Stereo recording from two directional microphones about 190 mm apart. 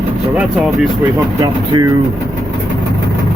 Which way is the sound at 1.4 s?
20° right (ahead or behind).